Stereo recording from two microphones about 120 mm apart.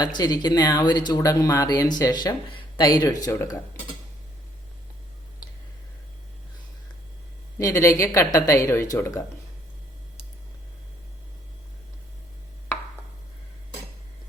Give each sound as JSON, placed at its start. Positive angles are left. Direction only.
{"t": 0.0, "sound": "a woman's voice", "side_deg": 35}
{"t": 7.6, "sound": "a woman's voice", "side_deg": 25}